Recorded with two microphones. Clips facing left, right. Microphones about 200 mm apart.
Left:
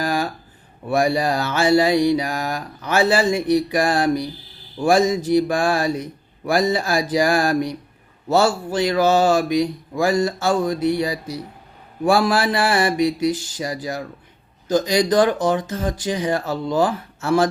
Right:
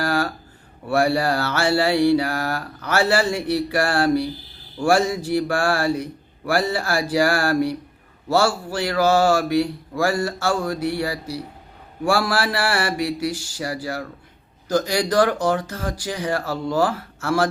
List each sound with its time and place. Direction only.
0.0 s a sound: 15° left (ahead or behind)
0.9 s mantra: 15° left (ahead or behind)
8.3 s speech: 20° left (ahead or behind)